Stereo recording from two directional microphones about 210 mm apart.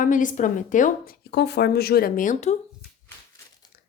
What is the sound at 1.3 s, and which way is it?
Speech, 55° left (ahead or behind).